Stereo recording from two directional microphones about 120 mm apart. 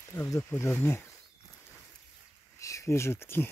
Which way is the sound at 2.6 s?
25° left (ahead or behind).